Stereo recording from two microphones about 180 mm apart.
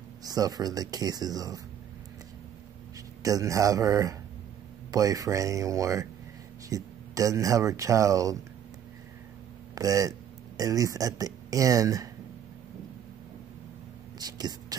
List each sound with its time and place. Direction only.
0.2 s speech: 20° right (ahead or behind)
3.2 s speech: 20° right (ahead or behind)
9.8 s speech: 20° right (ahead or behind)
14.2 s whispering: 20° right (ahead or behind)